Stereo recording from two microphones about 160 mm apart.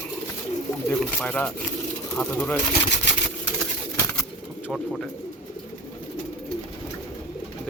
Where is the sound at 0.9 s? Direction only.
10° left (ahead or behind).